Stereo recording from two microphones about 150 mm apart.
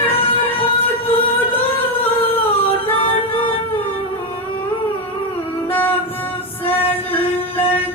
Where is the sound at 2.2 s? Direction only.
40° left (ahead or behind).